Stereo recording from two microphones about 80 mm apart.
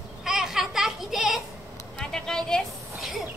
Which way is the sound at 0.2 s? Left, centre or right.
Centre.